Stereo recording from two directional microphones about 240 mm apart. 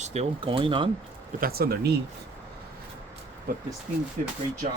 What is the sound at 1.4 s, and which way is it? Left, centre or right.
Speech, right.